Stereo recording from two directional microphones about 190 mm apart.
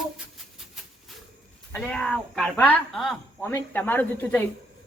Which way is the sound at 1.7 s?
5° left (ahead or behind).